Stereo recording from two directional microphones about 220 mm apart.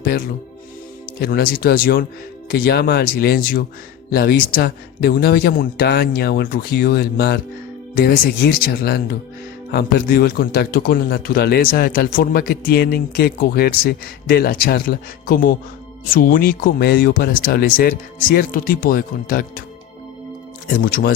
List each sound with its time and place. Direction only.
1.2 s a man's voice: 40° left (ahead or behind)
20.8 s speech: 40° left (ahead or behind)